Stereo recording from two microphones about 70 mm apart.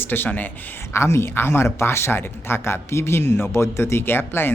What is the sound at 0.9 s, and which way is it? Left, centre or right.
Speech, left.